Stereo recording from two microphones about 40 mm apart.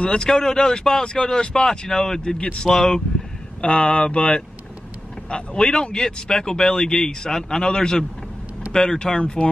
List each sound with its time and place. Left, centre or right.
0.0 s speech: left
3.6 s speech: left